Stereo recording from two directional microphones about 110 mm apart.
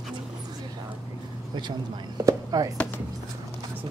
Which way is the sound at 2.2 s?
35° right (ahead or behind).